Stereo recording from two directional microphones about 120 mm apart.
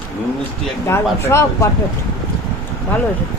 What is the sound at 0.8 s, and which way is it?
Speech, 20° left (ahead or behind).